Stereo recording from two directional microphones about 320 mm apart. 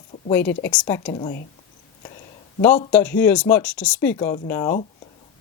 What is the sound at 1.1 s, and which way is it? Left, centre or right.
Speech, left.